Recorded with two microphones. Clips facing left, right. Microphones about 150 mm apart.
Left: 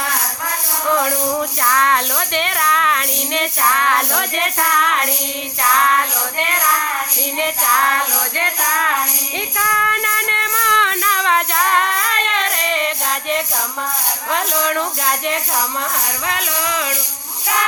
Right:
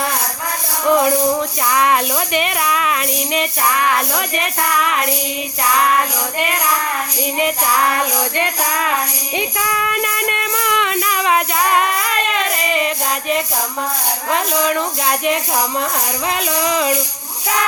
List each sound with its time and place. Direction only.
0.9 s music: 15° right (ahead or behind)
1.7 s speech: 15° right (ahead or behind)
9.6 s music: 10° right (ahead or behind)
14.3 s speech: 5° right (ahead or behind)
16.3 s music: 20° right (ahead or behind)